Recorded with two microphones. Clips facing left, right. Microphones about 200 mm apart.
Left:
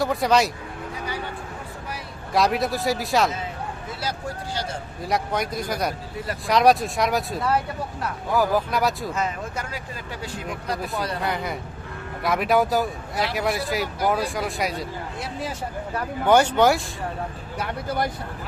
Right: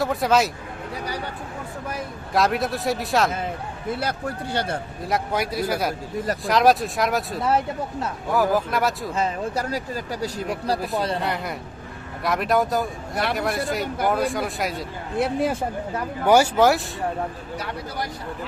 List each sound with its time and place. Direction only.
0.0 s a man's voice: centre (ahead or behind)
2.3 s a man's voice: centre (ahead or behind)
3.8 s a man's voice: 60° right (ahead or behind)
5.0 s a man's voice: 5° right (ahead or behind)
9.1 s speech: 35° right (ahead or behind)
10.9 s speech: 25° right (ahead or behind)
11.2 s a man's voice: centre (ahead or behind)
15.2 s a man's voice: 60° right (ahead or behind)
16.2 s a man's voice: 10° right (ahead or behind)
17.6 s speech: 55° left (ahead or behind)